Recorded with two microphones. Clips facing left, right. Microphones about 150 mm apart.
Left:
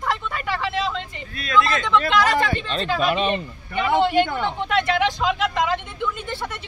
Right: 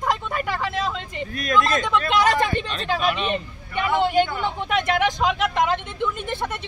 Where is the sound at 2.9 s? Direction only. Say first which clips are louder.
Left 2 dB; 45° left (ahead or behind).